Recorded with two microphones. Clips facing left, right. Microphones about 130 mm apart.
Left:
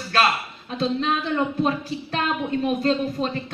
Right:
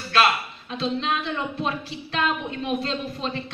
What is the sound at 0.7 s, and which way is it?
A woman's voice, 45° left (ahead or behind).